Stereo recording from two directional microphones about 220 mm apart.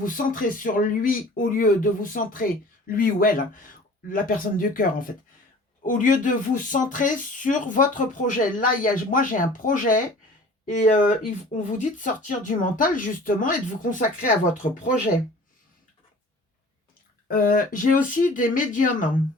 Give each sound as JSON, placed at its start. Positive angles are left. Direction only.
{"t": 0.0, "sound": "speech", "side_deg": 40}
{"t": 17.2, "sound": "speech", "side_deg": 40}